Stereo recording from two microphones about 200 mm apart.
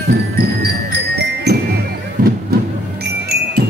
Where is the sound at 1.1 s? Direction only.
55° right (ahead or behind).